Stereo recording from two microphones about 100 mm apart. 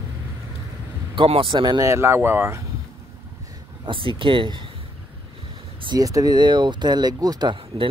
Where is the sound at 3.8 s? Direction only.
60° right (ahead or behind).